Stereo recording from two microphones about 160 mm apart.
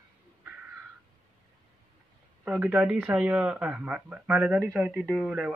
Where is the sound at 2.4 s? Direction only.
10° right (ahead or behind).